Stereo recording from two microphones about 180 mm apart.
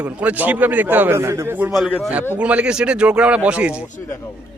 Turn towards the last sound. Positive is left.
turn(degrees=-5)  # may be behind; listen again after turning